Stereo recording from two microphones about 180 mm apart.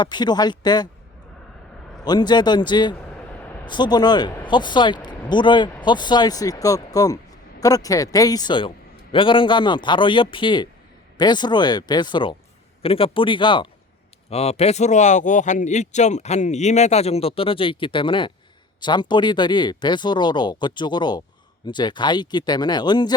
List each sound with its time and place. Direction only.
0.0 s speech: 25° left (ahead or behind)
2.0 s speech: 25° left (ahead or behind)